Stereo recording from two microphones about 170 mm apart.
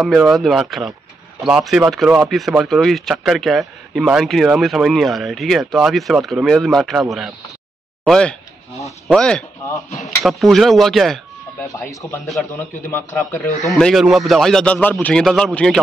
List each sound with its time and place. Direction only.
0.0 s speech: centre (ahead or behind)
11.6 s speech: 20° left (ahead or behind)
12.3 s speech: centre (ahead or behind)
12.9 s speech: 15° left (ahead or behind)
13.7 s speech: centre (ahead or behind)